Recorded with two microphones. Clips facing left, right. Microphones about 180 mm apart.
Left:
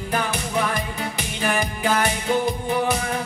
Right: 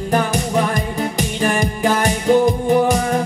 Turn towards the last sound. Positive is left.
turn(degrees=-45)  # may be behind; listen again after turning